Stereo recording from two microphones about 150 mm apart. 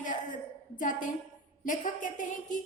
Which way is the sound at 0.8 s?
60° left (ahead or behind).